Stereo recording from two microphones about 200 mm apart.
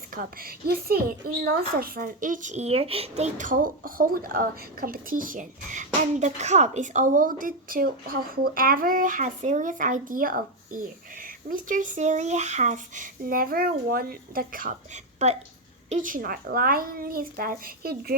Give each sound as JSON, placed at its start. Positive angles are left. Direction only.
{"t": 0.1, "sound": "a woman's voice", "side_deg": -45}